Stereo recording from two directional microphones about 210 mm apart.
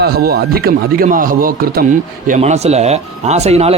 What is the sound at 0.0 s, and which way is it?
Speech, 45° right (ahead or behind).